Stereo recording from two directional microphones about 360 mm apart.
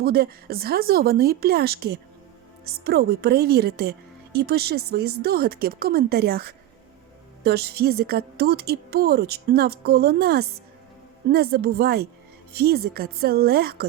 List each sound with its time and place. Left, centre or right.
0.0 s a woman's voice: right